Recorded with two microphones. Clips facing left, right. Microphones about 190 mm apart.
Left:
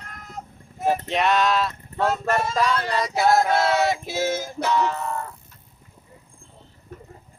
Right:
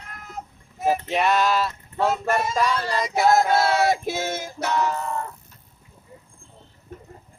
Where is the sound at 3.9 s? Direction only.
50° right (ahead or behind).